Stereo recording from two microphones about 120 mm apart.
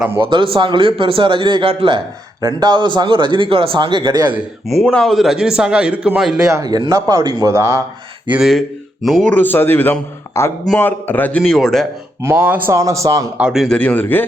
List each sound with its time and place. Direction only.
0.3 s a man's voice: 45° right (ahead or behind)
2.4 s a man's voice: 35° right (ahead or behind)
4.9 s a man's voice: 5° left (ahead or behind)
6.5 s a man's voice: 35° right (ahead or behind)
8.3 s speech: 5° right (ahead or behind)
9.2 s a man's voice: 15° left (ahead or behind)
12.2 s a man's voice: 20° right (ahead or behind)
13.3 s a man's voice: 5° right (ahead or behind)
13.7 s a man's voice: 15° left (ahead or behind)